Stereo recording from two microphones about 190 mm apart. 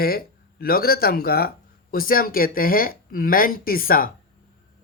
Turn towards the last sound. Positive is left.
turn(degrees=50)  # may be behind; listen again after turning